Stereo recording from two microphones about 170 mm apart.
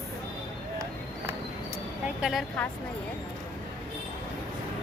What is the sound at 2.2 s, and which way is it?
Speech, centre (ahead or behind).